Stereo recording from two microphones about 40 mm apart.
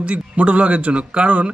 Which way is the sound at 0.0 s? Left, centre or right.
Right.